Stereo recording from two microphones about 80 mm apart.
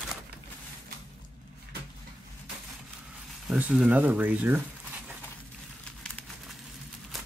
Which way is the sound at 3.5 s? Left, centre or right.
Centre.